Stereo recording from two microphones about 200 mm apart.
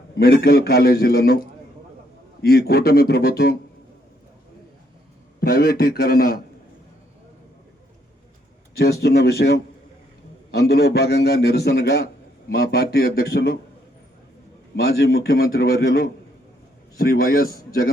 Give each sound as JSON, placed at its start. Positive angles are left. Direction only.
{"t": 0.2, "sound": "a man's voice", "side_deg": 50}
{"t": 5.4, "sound": "a man's voice", "side_deg": 50}
{"t": 8.8, "sound": "a man's voice", "side_deg": 50}
{"t": 14.8, "sound": "a man's voice", "side_deg": 55}